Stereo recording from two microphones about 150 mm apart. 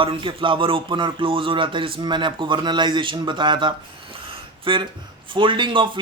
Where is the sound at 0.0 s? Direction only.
35° right (ahead or behind).